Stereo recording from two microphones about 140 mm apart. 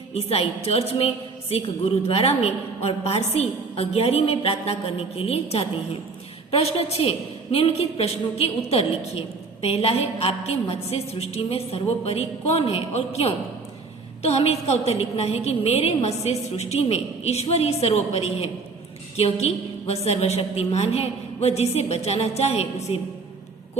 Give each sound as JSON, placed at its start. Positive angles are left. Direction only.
{"t": 0.1, "sound": "a woman's voice", "side_deg": 45}